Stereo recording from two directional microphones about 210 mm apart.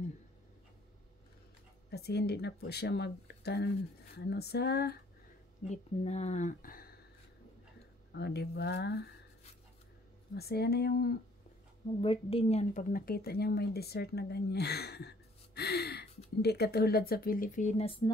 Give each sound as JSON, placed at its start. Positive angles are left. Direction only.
{"t": 1.9, "sound": "speech", "side_deg": 50}
{"t": 5.7, "sound": "speech", "side_deg": 30}
{"t": 8.1, "sound": "speech", "side_deg": 50}
{"t": 10.3, "sound": "speech", "side_deg": 50}
{"t": 12.0, "sound": "speech", "side_deg": 25}